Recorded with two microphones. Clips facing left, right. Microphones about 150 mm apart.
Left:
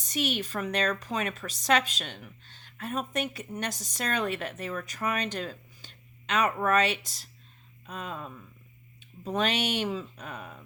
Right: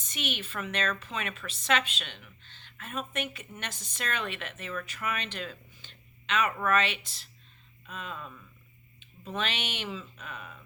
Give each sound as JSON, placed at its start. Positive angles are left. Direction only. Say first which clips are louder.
{"t": 0.0, "sound": "speech", "louder": "left 6 dB", "side_deg": 40}